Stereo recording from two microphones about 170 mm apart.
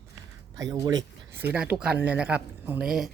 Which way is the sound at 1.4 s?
10° right (ahead or behind).